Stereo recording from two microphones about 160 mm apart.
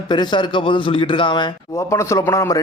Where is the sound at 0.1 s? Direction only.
30° left (ahead or behind).